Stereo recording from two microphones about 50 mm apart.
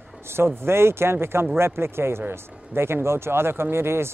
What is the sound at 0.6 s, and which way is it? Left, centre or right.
Speech, right.